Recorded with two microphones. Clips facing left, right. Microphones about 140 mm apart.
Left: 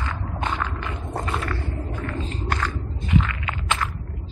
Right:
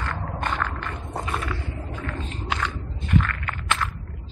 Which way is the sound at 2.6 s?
10° left (ahead or behind).